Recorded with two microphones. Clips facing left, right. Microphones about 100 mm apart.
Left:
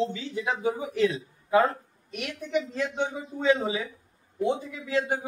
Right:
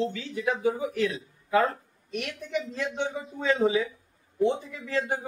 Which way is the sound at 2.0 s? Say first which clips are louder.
Right 1 dB; 5° left (ahead or behind).